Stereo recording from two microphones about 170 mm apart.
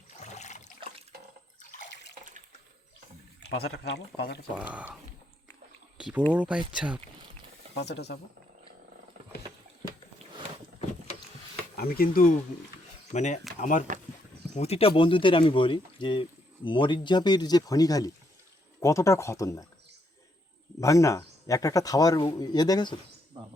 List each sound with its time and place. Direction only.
0.2 s water: 45° left (ahead or behind)
3.6 s speech: 75° left (ahead or behind)
4.7 s speech: 10° right (ahead or behind)
6.0 s speech: 5° right (ahead or behind)
7.8 s speech: 80° left
11.8 s speech: 60° left (ahead or behind)
13.1 s speech: 45° left (ahead or behind)
14.5 s speech: 40° left (ahead or behind); by 19.6 s 20° left (ahead or behind)
20.8 s speech: 20° left (ahead or behind)